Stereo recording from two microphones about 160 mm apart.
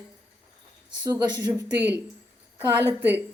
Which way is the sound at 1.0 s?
25° right (ahead or behind).